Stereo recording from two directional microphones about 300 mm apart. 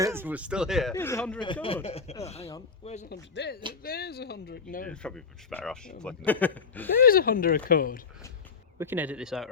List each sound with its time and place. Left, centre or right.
0.0 s speech: centre
1.6 s speech: centre
3.2 s speech: left
4.9 s speech: centre
7.0 s speech: left
8.8 s speech: centre